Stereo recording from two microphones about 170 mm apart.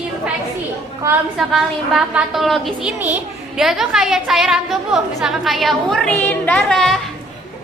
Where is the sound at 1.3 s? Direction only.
Centre (ahead or behind).